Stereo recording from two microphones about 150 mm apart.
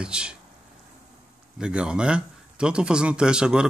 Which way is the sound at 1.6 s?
5° right (ahead or behind).